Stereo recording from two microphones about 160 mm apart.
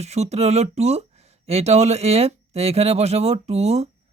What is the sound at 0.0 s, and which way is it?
Speech, 40° right (ahead or behind).